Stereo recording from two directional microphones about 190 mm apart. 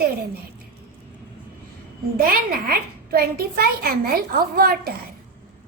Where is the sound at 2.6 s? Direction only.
55° right (ahead or behind).